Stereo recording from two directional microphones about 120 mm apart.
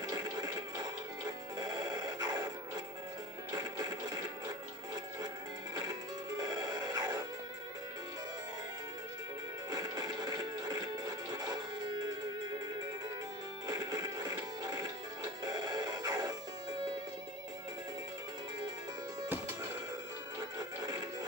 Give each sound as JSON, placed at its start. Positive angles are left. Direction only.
{"t": 0.0, "sound": "music", "side_deg": -35}
{"t": 5.8, "sound": "music", "side_deg": -35}
{"t": 9.7, "sound": "music", "side_deg": -35}
{"t": 13.7, "sound": "music", "side_deg": -35}
{"t": 20.3, "sound": "music", "side_deg": -35}